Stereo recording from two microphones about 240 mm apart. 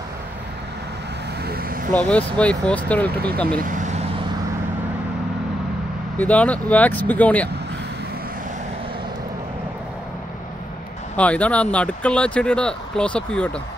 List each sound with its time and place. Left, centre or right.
1.4 s vehicle: right
2.0 s speech: centre
3.4 s speech: right
6.1 s speech: centre
11.1 s speech: centre